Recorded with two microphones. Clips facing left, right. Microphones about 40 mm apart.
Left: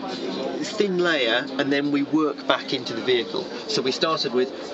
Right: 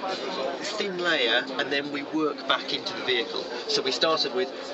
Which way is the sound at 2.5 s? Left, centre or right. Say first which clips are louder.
Left 3 dB; centre.